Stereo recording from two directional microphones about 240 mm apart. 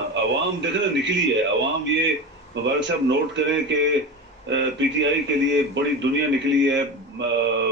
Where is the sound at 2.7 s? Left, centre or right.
Right.